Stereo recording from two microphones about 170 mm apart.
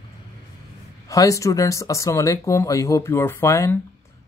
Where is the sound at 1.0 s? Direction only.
20° left (ahead or behind).